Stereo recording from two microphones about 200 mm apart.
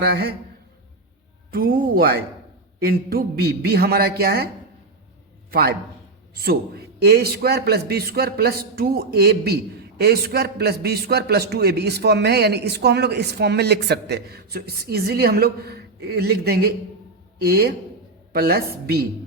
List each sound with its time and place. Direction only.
0.0 s a man's voice: 50° right (ahead or behind)
1.5 s a man's voice: 45° right (ahead or behind)
5.5 s a man's voice: 50° right (ahead or behind)